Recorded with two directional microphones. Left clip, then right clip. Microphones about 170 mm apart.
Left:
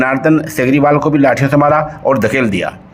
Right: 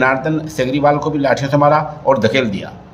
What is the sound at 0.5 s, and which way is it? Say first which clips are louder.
A man's voice: left 3 dB; 40° left (ahead or behind).